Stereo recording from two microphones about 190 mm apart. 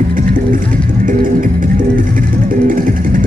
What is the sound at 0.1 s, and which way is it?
Music, 45° right (ahead or behind).